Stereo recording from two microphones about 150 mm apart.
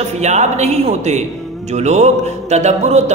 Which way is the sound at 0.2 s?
50° right (ahead or behind).